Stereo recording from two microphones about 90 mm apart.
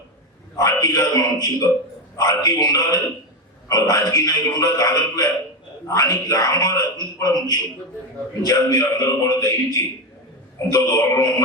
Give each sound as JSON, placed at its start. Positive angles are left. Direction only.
{"t": 0.5, "sound": "a man's voice", "side_deg": 45}
{"t": 10.7, "sound": "a man's voice", "side_deg": 35}